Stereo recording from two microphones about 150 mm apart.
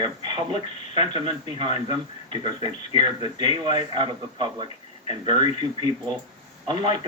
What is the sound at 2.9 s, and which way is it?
A man's voice, 30° right (ahead or behind).